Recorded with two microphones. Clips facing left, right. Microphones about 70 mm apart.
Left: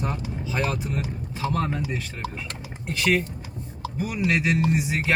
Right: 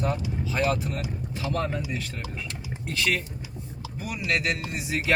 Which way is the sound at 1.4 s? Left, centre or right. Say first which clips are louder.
Left 2 dB; left.